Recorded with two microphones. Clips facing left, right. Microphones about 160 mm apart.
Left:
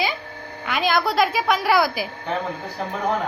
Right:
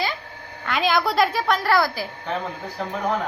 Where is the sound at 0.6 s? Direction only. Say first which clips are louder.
Even; 5° left (ahead or behind).